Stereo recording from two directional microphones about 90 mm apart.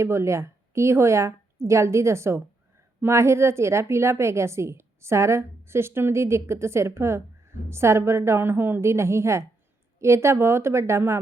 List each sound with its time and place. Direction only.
0.0 s a woman's voice: 30° right (ahead or behind)